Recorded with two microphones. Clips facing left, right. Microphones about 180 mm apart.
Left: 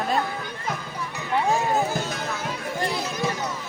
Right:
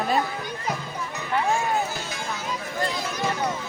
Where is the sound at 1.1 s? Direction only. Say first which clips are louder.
Left 1 dB; 20° left (ahead or behind).